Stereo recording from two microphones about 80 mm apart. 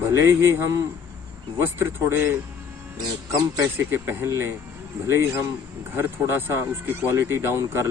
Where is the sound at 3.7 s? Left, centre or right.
Right.